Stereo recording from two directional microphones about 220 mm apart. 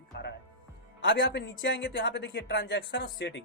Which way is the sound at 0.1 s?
50° left (ahead or behind).